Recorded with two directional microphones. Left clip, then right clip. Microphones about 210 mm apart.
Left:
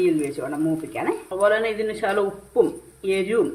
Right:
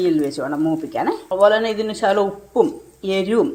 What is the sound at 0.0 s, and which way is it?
Speech, 25° right (ahead or behind).